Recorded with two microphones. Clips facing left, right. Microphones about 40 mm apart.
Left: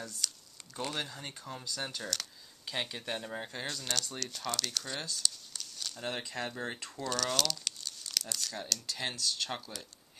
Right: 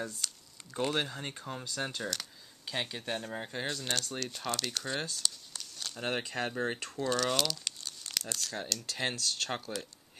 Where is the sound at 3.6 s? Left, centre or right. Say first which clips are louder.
Right 3 dB; right.